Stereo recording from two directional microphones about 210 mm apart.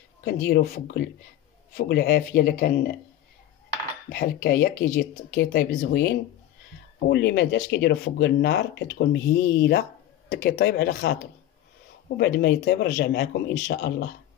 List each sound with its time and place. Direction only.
0.5 s speech: 50° left (ahead or behind)
4.1 s speech: 50° left (ahead or behind)